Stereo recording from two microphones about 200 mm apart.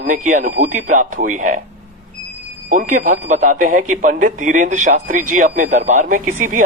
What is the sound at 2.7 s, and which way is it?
Speech, 40° right (ahead or behind).